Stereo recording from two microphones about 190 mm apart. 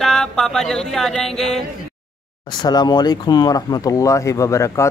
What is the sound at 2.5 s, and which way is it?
Speech, 20° left (ahead or behind).